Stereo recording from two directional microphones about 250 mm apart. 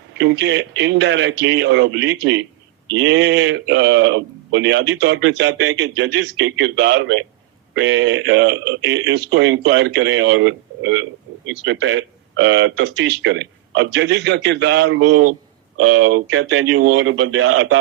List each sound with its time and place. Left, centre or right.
0.2 s speech: right
15.0 s a man's voice: right
15.8 s speech: right